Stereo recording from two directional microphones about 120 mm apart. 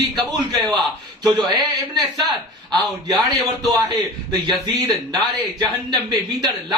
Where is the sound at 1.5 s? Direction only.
35° right (ahead or behind).